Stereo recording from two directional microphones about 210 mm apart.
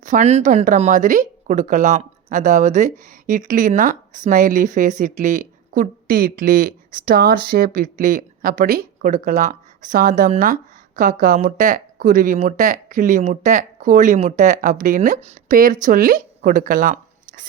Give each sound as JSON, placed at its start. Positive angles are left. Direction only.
{"t": 0.0, "sound": "speech", "side_deg": -35}